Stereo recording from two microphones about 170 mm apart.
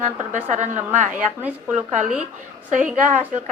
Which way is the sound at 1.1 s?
10° right (ahead or behind).